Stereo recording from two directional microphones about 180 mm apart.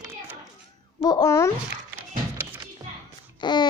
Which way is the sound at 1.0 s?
20° left (ahead or behind).